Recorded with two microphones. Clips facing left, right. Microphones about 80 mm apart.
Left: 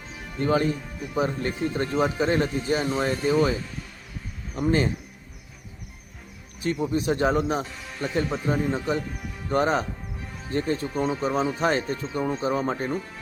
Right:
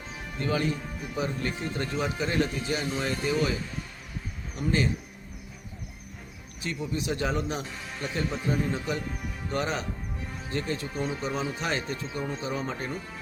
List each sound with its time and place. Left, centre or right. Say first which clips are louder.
0.3 s speech: left 5 dB; left
4.6 s speech: left 4 dB; left
6.7 s speech: left 6 dB; left